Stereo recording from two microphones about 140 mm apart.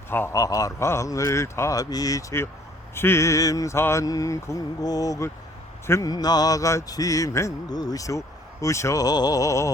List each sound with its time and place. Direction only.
0.1 s mantra: 15° left (ahead or behind)